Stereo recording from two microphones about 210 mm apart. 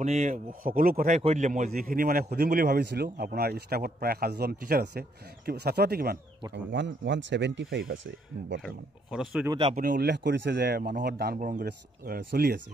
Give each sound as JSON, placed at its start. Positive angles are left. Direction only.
{"t": 0.0, "sound": "speech", "side_deg": -35}
{"t": 6.5, "sound": "speech", "side_deg": -60}
{"t": 8.6, "sound": "speech", "side_deg": 0}
{"t": 9.5, "sound": "speech", "side_deg": -25}
{"t": 9.8, "sound": "speech", "side_deg": -45}